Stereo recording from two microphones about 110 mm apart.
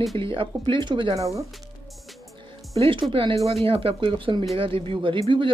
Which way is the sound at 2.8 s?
55° right (ahead or behind).